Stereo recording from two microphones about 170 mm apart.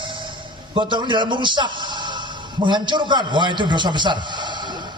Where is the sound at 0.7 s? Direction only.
30° right (ahead or behind).